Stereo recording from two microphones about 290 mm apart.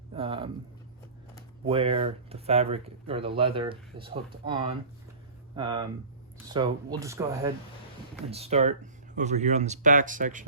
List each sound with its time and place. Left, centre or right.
0.2 s a sound: centre
1.6 s speech: centre
8.3 s speech: right